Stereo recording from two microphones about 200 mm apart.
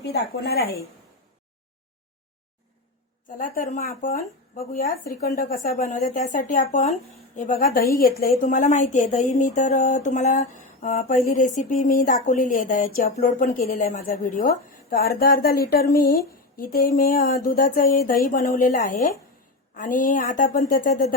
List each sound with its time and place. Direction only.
0.0 s speech: 55° left (ahead or behind)
3.2 s speech: 40° left (ahead or behind)